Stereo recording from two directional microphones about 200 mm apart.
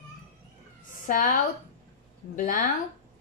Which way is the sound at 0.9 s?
45° left (ahead or behind).